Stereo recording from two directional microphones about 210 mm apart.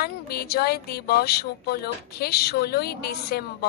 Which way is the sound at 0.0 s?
50° left (ahead or behind).